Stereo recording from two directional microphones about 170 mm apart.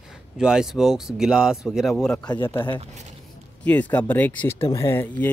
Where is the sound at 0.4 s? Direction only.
5° right (ahead or behind).